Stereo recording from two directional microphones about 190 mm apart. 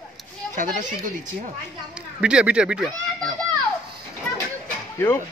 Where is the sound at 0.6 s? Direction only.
45° right (ahead or behind).